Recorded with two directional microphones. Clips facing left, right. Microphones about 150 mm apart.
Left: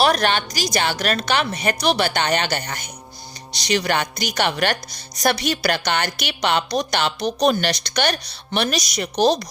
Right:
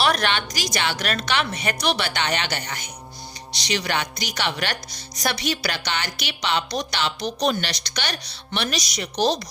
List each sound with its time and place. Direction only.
0.0 s a woman's voice: 40° left (ahead or behind)